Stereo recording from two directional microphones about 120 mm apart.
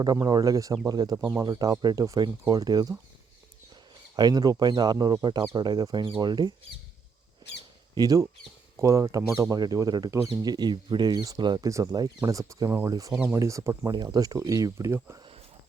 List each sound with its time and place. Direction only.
0.0 s speech: 35° right (ahead or behind)
4.1 s speech: 35° right (ahead or behind)
7.9 s speech: 30° right (ahead or behind)